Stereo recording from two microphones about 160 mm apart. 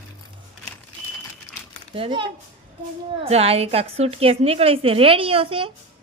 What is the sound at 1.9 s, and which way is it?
A woman's voice, 35° right (ahead or behind).